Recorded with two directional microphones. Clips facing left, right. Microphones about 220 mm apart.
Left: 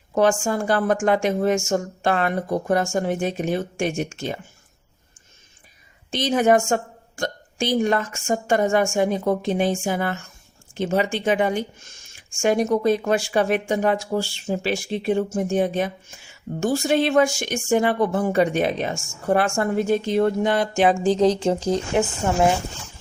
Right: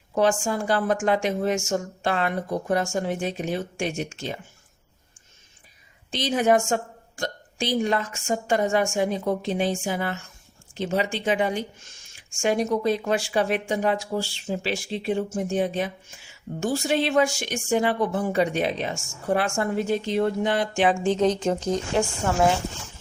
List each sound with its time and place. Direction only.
0.1 s speech: 50° left (ahead or behind)
6.1 s speech: 50° left (ahead or behind); by 22.5 s 25° left (ahead or behind)